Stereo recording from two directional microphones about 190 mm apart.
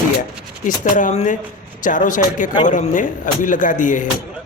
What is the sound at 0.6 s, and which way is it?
Speech, 40° left (ahead or behind).